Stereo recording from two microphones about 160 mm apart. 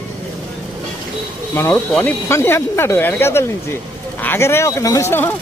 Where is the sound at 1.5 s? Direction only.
15° left (ahead or behind).